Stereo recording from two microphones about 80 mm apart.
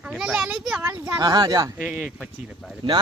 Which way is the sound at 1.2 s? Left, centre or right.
Right.